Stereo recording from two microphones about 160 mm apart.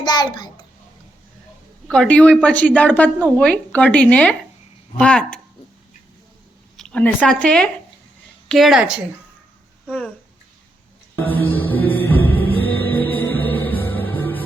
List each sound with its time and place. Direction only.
0.0 s a child's voice: 25° left (ahead or behind)
1.9 s a woman's voice: 5° left (ahead or behind)
6.7 s a sound: 5° left (ahead or behind)
7.2 s a woman's voice: 5° left (ahead or behind)
11.2 s music: 10° left (ahead or behind)